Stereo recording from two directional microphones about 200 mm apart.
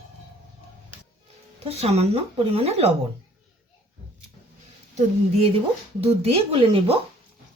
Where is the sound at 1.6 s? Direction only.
30° right (ahead or behind).